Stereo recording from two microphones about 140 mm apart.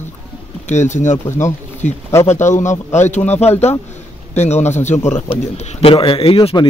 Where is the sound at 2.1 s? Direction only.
20° left (ahead or behind).